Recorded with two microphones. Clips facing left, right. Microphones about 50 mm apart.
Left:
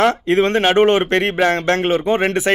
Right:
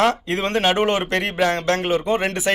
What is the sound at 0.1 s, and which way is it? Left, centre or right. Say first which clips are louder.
Speech: left 6 dB; left.